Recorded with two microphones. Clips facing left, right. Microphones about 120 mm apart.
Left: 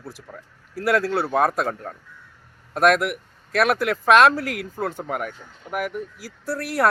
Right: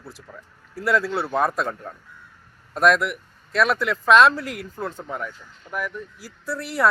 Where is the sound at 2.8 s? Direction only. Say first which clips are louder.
Left 1 dB; 55° left (ahead or behind).